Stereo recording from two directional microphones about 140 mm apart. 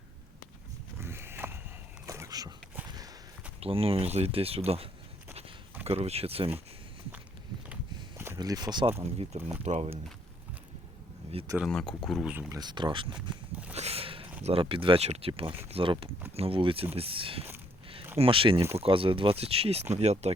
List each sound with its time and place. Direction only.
0.9 s pig: 15° right (ahead or behind)
2.0 s a sound: 20° right (ahead or behind)
3.6 s speech: 45° right (ahead or behind)
8.4 s speech: 30° right (ahead or behind)
9.6 s speech: 50° right (ahead or behind)
11.6 s speech: 5° left (ahead or behind)
12.3 s speech: 15° right (ahead or behind)
12.5 s speech: 30° right (ahead or behind)
13.7 s a sound: 45° right (ahead or behind)
14.4 s speech: 40° right (ahead or behind)